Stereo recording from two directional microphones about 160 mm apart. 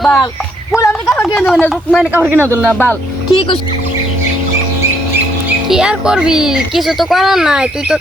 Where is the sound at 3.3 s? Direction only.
30° left (ahead or behind).